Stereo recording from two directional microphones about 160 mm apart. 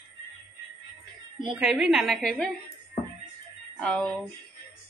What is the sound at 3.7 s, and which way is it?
Speech, 5° left (ahead or behind).